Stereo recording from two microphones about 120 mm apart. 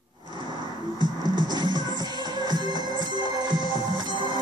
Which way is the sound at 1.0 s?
35° right (ahead or behind).